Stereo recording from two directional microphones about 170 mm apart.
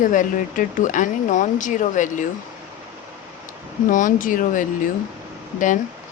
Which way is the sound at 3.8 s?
50° left (ahead or behind).